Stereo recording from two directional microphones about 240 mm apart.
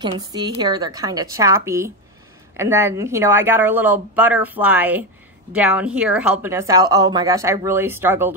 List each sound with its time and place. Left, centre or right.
0.0 s a woman's voice: centre